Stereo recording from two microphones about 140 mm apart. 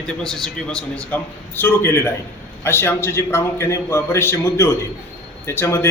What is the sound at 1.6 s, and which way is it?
A man's voice, 20° left (ahead or behind).